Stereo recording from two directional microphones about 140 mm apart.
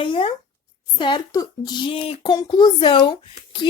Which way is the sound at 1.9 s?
40° left (ahead or behind).